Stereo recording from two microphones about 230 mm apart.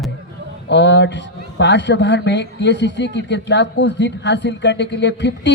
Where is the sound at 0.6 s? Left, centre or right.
Left.